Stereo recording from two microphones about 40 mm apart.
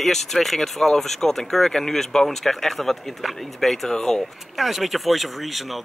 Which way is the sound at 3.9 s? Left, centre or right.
Centre.